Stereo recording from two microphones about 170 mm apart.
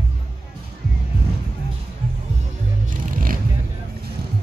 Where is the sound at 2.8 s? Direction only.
55° right (ahead or behind).